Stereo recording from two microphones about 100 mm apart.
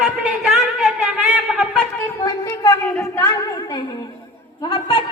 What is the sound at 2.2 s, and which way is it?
Speech, 45° left (ahead or behind).